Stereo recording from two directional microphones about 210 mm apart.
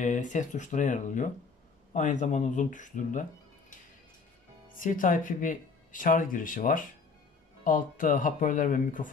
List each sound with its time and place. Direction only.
0.0 s speech: 35° left (ahead or behind)
4.7 s speech: 40° left (ahead or behind)